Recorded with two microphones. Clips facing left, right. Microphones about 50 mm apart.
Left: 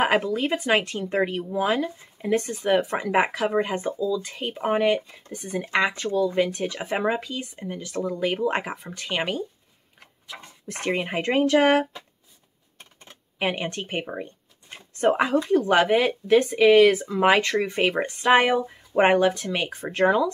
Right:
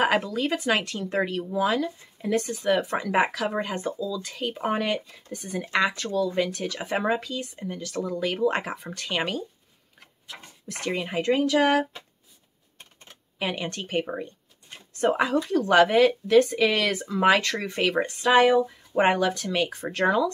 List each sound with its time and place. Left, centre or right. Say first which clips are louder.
0.0 s speech: left 2 dB; centre
10.7 s speech: left 3 dB; left
13.4 s speech: left 3 dB; left
15.4 s speech: right 3 dB; centre